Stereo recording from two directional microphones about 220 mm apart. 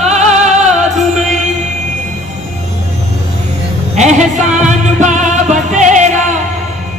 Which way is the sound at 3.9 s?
30° right (ahead or behind).